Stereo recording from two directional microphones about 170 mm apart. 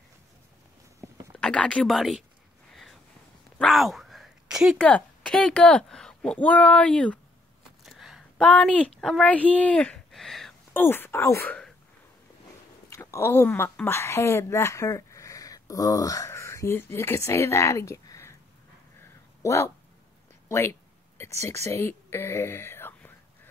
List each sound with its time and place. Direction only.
1.4 s speech: 5° left (ahead or behind)
3.5 s a sound: centre (ahead or behind)
4.8 s speech: 5° left (ahead or behind)
7.8 s a sound: centre (ahead or behind)
8.5 s speech: 10° left (ahead or behind)
10.7 s speech: 10° left (ahead or behind)
12.9 s speech: 15° left (ahead or behind)
18.9 s a sound: 15° left (ahead or behind)
20.4 s speech: 15° left (ahead or behind)
21.6 s whispering: 15° left (ahead or behind)